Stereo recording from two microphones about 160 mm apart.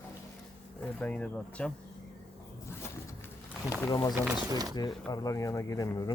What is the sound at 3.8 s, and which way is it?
Speech, 20° left (ahead or behind).